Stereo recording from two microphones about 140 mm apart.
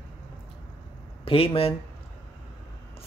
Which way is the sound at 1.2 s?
40° left (ahead or behind).